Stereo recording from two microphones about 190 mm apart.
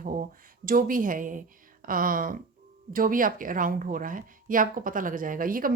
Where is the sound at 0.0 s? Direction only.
40° right (ahead or behind).